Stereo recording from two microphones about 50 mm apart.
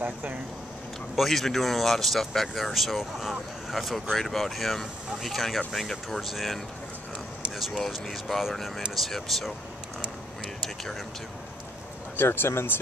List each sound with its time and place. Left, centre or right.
0.0 s speech: right
1.1 s speech: centre
12.2 s speech: left